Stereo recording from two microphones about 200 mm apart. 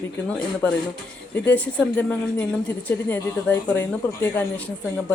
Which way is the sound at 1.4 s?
10° left (ahead or behind).